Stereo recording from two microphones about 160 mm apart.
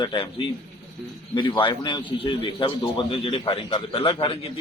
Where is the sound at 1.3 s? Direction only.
30° left (ahead or behind).